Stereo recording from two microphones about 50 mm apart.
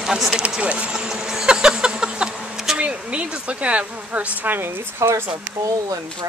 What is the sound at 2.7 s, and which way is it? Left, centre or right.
Speech, right.